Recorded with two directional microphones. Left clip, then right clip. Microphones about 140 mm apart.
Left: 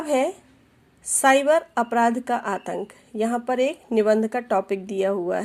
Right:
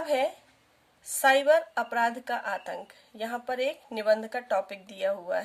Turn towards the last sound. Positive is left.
turn(degrees=35)  # may be behind; listen again after turning